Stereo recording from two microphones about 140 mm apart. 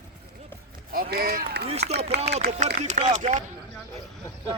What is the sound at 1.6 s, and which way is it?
Speech, 50° right (ahead or behind).